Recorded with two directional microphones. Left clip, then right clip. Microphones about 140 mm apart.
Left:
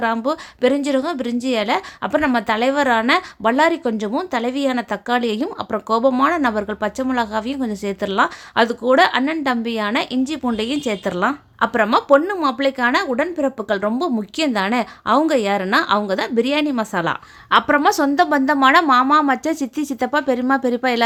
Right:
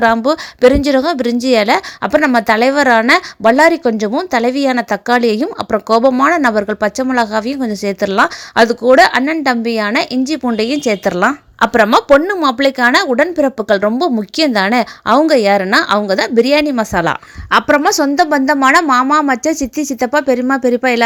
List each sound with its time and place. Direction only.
0.0 s a woman's voice: 45° right (ahead or behind); by 21.0 s 25° right (ahead or behind)